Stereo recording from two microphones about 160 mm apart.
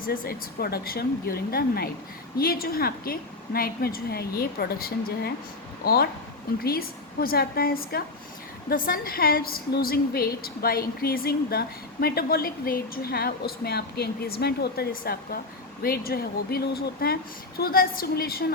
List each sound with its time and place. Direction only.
0.0 s a woman's voice: 65° left (ahead or behind)